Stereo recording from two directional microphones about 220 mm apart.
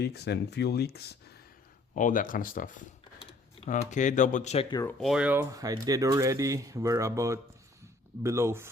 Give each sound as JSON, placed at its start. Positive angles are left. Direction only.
{"t": 0.0, "sound": "speech", "side_deg": 50}
{"t": 4.7, "sound": "speech", "side_deg": 15}
{"t": 4.9, "sound": "speech", "side_deg": 0}